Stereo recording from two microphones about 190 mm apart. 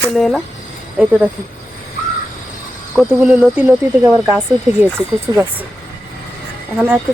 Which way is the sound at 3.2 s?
5° right (ahead or behind).